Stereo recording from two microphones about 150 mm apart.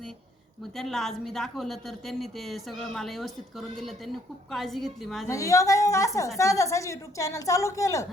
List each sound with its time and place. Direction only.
0.8 s a woman's voice: centre (ahead or behind)
5.3 s a woman's voice: 20° left (ahead or behind)